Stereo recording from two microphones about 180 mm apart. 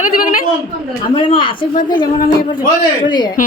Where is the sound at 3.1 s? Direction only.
25° left (ahead or behind).